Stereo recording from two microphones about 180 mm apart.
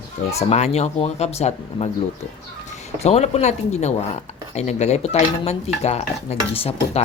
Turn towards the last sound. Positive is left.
turn(degrees=35)  # may be behind; listen again after turning